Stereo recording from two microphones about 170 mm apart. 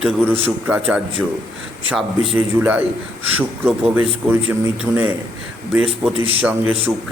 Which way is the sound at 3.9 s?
10° right (ahead or behind).